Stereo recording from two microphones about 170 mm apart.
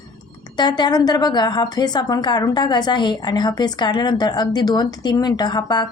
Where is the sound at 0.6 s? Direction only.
25° left (ahead or behind).